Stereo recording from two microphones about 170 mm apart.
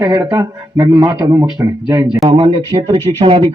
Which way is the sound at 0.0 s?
20° right (ahead or behind).